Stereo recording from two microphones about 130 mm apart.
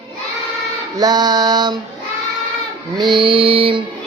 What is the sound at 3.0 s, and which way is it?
Music, 40° right (ahead or behind).